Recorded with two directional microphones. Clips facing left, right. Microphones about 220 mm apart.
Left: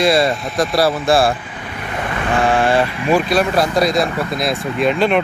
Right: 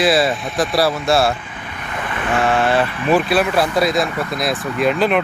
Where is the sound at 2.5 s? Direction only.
15° left (ahead or behind).